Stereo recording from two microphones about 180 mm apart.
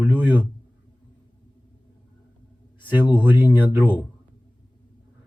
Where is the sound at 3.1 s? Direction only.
10° right (ahead or behind).